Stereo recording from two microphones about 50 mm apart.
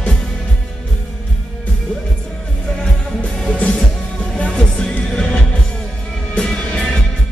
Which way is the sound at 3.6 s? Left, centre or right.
Centre.